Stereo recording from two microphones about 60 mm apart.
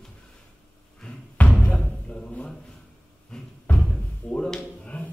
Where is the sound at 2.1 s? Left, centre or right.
Centre.